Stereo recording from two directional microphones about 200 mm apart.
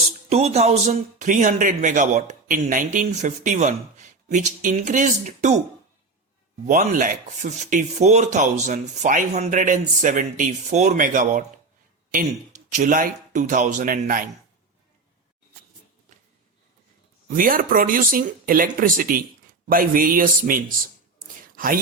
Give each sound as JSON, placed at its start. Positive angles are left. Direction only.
{"t": 0.3, "sound": "speech", "side_deg": -30}
{"t": 6.7, "sound": "speech", "side_deg": -40}
{"t": 12.7, "sound": "speech", "side_deg": -40}
{"t": 17.2, "sound": "speech", "side_deg": -45}
{"t": 21.5, "sound": "whispering", "side_deg": -45}